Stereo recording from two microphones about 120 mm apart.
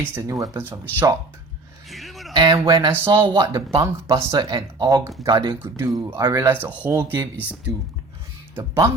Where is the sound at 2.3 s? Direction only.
35° right (ahead or behind).